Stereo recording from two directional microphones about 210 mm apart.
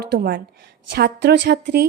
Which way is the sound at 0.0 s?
50° right (ahead or behind).